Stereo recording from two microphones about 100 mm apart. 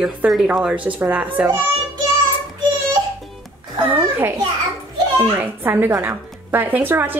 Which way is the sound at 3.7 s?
20° right (ahead or behind).